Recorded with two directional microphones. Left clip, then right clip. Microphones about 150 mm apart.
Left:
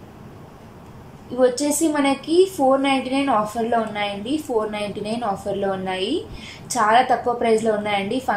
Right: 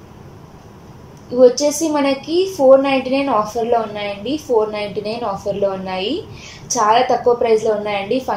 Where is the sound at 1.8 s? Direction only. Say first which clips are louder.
Right 3 dB; 20° right (ahead or behind).